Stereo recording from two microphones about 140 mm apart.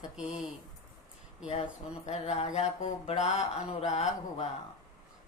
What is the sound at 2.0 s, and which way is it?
Mantra, 50° left (ahead or behind).